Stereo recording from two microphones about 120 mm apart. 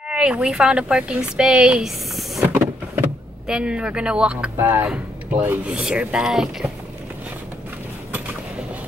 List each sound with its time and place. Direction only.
0.1 s speech: 10° right (ahead or behind)
2.4 s power windows: 15° right (ahead or behind)
3.4 s speech: 5° right (ahead or behind)